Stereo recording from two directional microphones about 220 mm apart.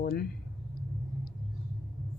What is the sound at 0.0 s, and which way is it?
Speech, 45° left (ahead or behind).